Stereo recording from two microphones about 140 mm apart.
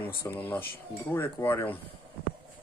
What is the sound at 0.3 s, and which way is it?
Speech, 10° left (ahead or behind).